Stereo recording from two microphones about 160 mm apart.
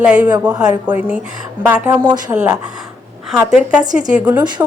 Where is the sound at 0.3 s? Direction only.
25° right (ahead or behind).